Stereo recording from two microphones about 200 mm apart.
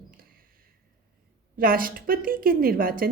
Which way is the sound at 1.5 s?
45° right (ahead or behind).